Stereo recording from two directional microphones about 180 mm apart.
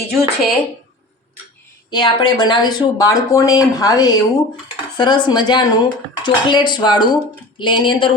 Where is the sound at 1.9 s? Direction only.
25° left (ahead or behind).